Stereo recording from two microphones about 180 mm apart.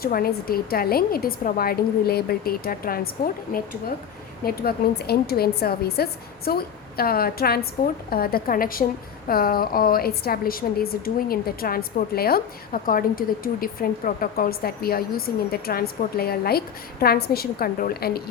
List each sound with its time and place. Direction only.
0.0 s a woman's voice: 55° left (ahead or behind)